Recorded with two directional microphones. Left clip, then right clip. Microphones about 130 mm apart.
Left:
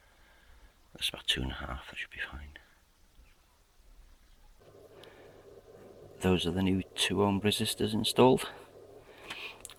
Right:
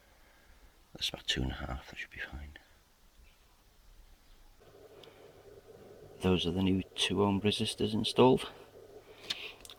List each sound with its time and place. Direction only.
1.1 s speech: 35° right (ahead or behind)
6.1 s speech: 5° right (ahead or behind)
7.6 s a sound: 5° right (ahead or behind)